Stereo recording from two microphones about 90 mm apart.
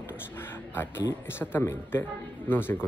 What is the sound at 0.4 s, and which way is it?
A man's voice, 25° left (ahead or behind).